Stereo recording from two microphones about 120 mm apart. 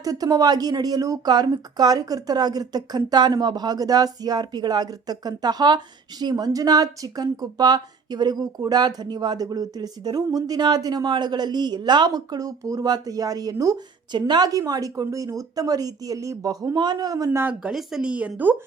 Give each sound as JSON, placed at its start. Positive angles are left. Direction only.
{"t": 0.0, "sound": "speech", "side_deg": -30}
{"t": 17.4, "sound": "speech", "side_deg": -5}